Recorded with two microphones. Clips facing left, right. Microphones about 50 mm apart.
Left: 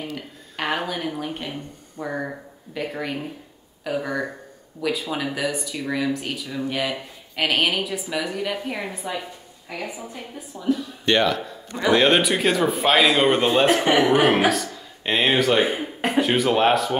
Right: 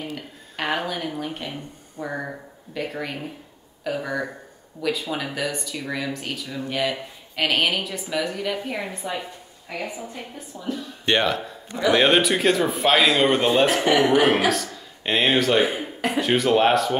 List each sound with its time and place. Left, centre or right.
0.1 s speech: centre
11.1 s speech: centre
12.0 s speech: centre
15.6 s speech: left
16.2 s speech: centre